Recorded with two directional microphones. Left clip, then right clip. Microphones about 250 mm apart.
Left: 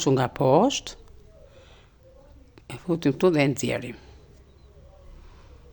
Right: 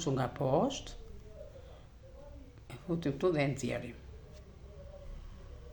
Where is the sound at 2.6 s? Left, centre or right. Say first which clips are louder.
Left 11 dB; left.